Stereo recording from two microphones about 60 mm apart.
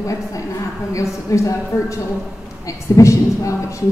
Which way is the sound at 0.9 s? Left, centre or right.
Left.